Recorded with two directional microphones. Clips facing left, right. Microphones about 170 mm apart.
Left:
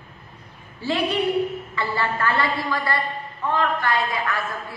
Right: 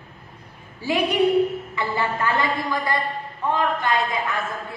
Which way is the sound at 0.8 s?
15° right (ahead or behind).